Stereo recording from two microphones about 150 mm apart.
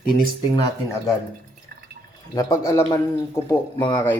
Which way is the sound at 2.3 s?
20° left (ahead or behind).